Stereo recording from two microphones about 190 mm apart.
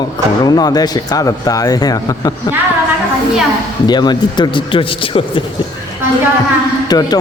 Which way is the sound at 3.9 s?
20° left (ahead or behind).